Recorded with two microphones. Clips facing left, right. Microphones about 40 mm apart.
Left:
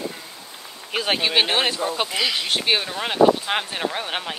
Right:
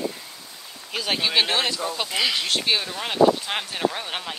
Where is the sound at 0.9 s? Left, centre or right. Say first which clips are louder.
Left 3 dB; left.